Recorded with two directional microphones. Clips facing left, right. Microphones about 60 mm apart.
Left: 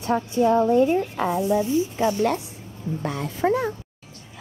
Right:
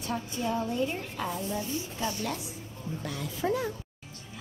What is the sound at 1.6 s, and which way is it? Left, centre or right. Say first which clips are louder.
Speech: left 12 dB; left.